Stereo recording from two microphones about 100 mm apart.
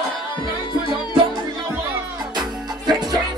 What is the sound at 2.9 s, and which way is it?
Music, 40° right (ahead or behind).